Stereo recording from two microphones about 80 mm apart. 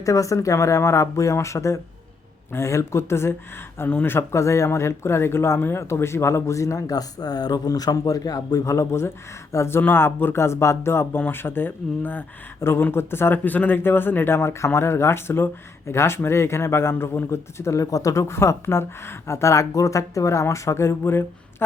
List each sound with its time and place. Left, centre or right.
0.0 s a man's voice: left